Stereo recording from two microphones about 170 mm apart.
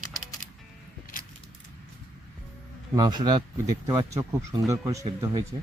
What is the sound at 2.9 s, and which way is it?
Speech, 25° right (ahead or behind).